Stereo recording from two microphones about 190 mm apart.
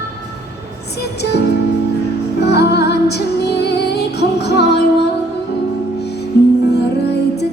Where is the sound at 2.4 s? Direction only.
60° left (ahead or behind).